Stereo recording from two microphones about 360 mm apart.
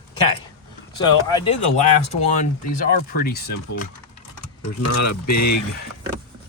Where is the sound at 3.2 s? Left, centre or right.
Left.